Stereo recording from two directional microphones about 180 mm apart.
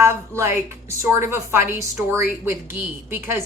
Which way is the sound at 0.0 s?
15° right (ahead or behind).